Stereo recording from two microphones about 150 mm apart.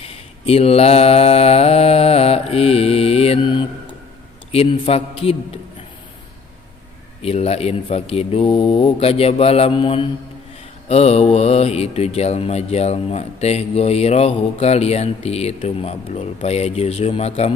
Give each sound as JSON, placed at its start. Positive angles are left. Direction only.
{"t": 0.0, "sound": "mantra", "side_deg": 40}
{"t": 4.5, "sound": "a man's voice", "side_deg": 40}
{"t": 7.2, "sound": "speech", "side_deg": 45}